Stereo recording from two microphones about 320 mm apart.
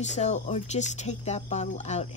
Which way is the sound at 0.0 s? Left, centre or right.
Left.